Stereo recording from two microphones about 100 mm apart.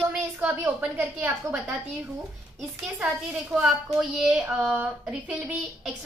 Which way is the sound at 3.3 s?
5° right (ahead or behind).